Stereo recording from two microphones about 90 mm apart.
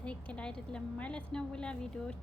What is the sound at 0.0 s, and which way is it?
A woman's voice, 15° left (ahead or behind).